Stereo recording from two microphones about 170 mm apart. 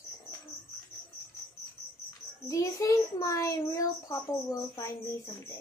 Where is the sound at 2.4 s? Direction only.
20° left (ahead or behind).